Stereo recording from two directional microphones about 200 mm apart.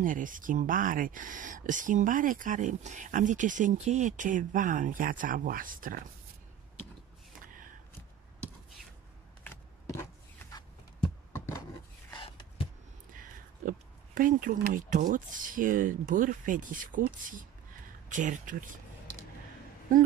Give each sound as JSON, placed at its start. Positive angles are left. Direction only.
{"t": 0.0, "sound": "speech", "side_deg": -40}
{"t": 9.4, "sound": "a sound", "side_deg": 10}
{"t": 11.3, "sound": "rub", "side_deg": 15}
{"t": 12.1, "sound": "a sound", "side_deg": 25}
{"t": 13.1, "sound": "speech", "side_deg": -40}
{"t": 19.9, "sound": "speech", "side_deg": -40}